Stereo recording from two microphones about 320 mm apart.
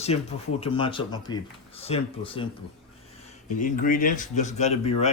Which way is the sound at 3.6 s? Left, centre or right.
Left.